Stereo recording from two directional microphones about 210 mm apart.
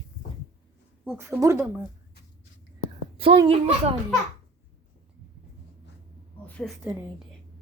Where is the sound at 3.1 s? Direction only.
25° right (ahead or behind).